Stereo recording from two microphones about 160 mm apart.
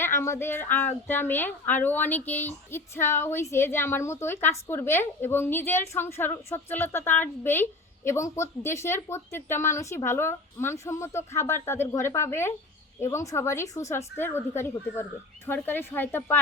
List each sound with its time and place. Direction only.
0.0 s a woman's voice: 15° left (ahead or behind)